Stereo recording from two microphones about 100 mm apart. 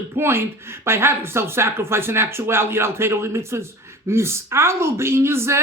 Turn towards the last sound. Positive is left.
turn(degrees=-25)  # may be behind; listen again after turning